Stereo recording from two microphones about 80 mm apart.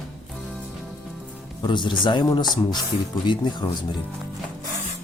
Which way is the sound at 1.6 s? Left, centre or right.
Left.